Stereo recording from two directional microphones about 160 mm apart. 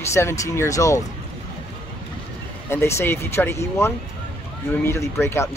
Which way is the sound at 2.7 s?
15° left (ahead or behind).